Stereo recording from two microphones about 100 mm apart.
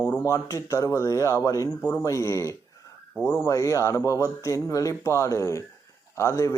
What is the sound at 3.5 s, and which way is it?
Speech, 30° left (ahead or behind).